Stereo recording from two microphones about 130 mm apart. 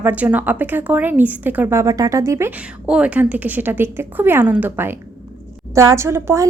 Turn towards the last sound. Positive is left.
turn(degrees=-20)  # may be behind; listen again after turning